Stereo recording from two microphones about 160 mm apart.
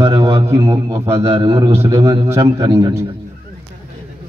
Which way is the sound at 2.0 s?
30° right (ahead or behind).